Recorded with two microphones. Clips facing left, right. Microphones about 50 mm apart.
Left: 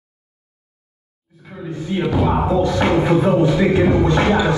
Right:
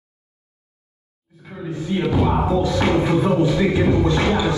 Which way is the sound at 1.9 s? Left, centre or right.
Centre.